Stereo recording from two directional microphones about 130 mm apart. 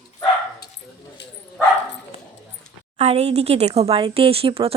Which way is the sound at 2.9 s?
55° right (ahead or behind).